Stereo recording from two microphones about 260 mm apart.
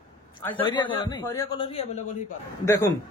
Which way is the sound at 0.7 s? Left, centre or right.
Centre.